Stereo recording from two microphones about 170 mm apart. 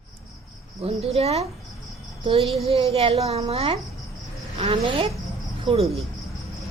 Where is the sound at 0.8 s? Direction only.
35° right (ahead or behind).